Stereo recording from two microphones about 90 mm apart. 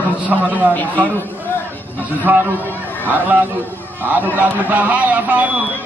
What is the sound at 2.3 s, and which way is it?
A man's voice, 20° right (ahead or behind).